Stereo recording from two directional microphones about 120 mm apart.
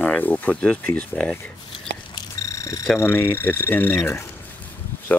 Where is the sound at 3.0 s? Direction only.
20° left (ahead or behind).